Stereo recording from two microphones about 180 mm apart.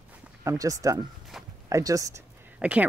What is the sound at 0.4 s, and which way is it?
Speech, 20° right (ahead or behind).